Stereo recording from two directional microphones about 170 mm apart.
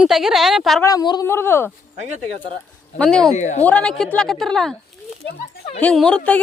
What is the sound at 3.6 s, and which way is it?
A woman's voice, 5° left (ahead or behind).